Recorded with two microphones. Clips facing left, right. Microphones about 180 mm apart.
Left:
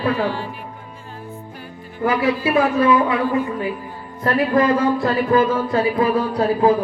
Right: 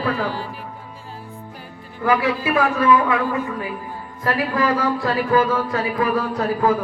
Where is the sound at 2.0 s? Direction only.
30° left (ahead or behind).